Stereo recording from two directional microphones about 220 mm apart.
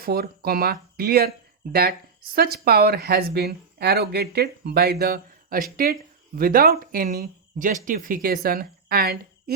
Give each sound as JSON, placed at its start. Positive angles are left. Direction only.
{"t": 0.0, "sound": "speech", "side_deg": -45}